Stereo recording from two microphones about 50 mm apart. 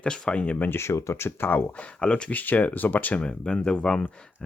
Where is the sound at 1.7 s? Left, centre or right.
Left.